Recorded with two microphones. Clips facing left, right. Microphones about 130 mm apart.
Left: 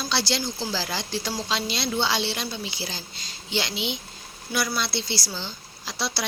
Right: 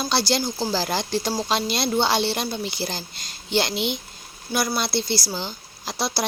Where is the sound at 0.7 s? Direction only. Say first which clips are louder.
Right 5 dB; 50° right (ahead or behind).